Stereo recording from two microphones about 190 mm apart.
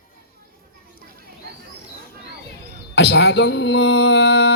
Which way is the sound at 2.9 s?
60° left (ahead or behind).